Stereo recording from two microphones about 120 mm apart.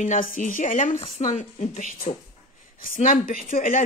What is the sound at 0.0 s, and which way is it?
A woman's voice, 90° left.